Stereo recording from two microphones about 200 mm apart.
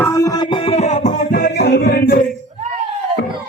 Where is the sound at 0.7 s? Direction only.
35° left (ahead or behind); by 2.1 s 50° left (ahead or behind).